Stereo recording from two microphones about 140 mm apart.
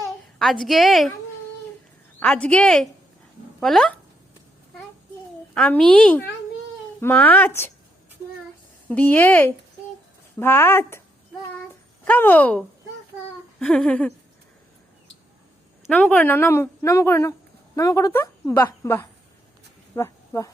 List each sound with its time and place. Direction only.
0.3 s a woman's voice: centre (ahead or behind)
2.1 s a woman's voice: 10° left (ahead or behind)
5.5 s a woman's voice: 10° left (ahead or behind)
8.9 s a woman's voice: 10° left (ahead or behind)
12.0 s a woman's voice: 15° left (ahead or behind)
15.9 s a woman's voice: 10° left (ahead or behind)